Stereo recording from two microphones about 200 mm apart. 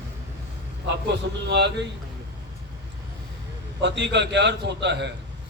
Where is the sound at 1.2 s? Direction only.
60° right (ahead or behind).